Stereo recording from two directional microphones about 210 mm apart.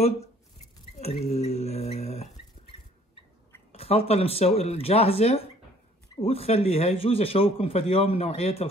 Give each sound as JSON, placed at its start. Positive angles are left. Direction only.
{"t": 0.9, "sound": "speech", "side_deg": 30}
{"t": 3.7, "sound": "a man's voice", "side_deg": 30}